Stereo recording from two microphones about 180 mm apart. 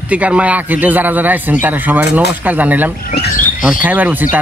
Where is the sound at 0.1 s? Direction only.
5° right (ahead or behind).